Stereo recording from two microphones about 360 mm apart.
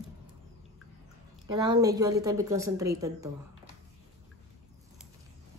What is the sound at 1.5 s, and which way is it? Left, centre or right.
A woman's voice, centre.